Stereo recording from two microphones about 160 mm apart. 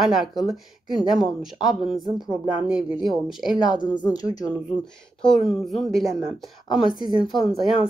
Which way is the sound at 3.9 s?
25° left (ahead or behind).